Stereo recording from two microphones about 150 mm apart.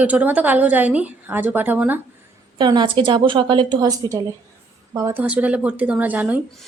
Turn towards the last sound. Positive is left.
turn(degrees=-10)  # may be behind; listen again after turning